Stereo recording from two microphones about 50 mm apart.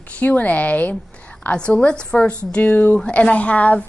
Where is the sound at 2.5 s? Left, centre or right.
Left.